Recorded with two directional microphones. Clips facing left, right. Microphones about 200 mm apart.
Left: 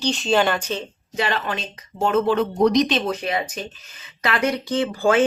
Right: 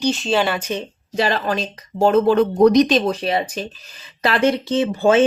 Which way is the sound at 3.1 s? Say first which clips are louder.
Right 4 dB; 30° right (ahead or behind).